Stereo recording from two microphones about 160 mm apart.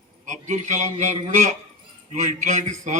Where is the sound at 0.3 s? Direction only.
45° right (ahead or behind).